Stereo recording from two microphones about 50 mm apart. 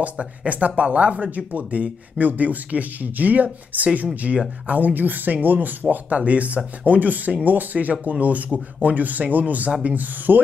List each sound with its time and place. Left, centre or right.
0.0 s speech: right